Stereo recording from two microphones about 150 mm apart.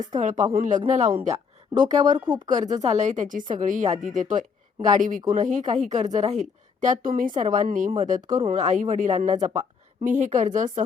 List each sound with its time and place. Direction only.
0.2 s a woman's voice: 55° right (ahead or behind)